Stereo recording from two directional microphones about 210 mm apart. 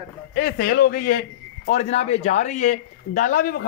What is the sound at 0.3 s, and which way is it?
Speech, 45° left (ahead or behind).